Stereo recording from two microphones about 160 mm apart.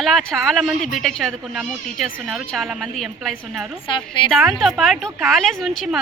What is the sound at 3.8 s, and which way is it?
Speech, 30° left (ahead or behind).